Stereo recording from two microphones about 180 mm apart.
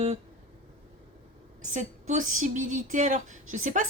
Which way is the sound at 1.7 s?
40° right (ahead or behind).